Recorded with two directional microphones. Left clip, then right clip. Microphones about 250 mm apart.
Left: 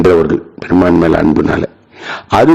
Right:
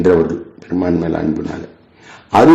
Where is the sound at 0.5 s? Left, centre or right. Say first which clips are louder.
Left 9 dB; left.